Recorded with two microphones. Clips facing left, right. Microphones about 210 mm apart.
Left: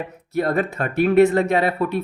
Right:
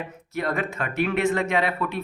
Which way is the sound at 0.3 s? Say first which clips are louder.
Left 6 dB; 40° left (ahead or behind).